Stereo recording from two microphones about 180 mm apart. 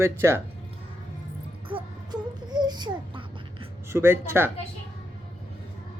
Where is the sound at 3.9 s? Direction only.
15° right (ahead or behind).